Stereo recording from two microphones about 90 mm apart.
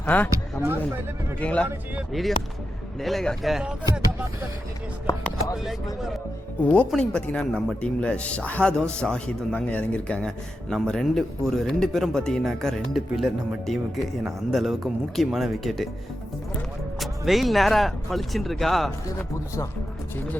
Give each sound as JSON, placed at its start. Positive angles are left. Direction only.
{"t": 0.0, "sound": "speech", "side_deg": 15}
{"t": 1.4, "sound": "a man's voice", "side_deg": 15}
{"t": 2.1, "sound": "speech", "side_deg": 0}
{"t": 5.1, "sound": "speech", "side_deg": 40}
{"t": 6.7, "sound": "a man's voice", "side_deg": 10}
{"t": 17.0, "sound": "speech", "side_deg": 0}